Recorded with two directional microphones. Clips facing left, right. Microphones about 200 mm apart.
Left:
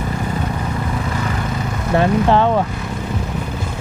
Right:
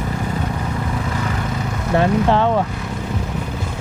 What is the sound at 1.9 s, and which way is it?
Speech, 15° left (ahead or behind).